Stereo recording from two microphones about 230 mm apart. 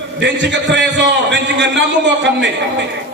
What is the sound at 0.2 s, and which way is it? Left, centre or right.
A man's voice, right.